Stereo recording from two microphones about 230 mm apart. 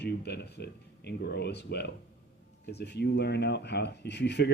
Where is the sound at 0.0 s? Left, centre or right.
Left.